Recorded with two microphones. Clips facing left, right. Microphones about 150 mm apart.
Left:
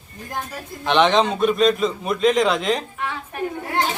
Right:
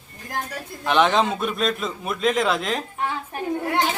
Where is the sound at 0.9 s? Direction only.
5° right (ahead or behind).